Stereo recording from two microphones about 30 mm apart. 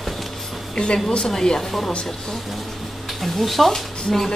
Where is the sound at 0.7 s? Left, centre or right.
Left.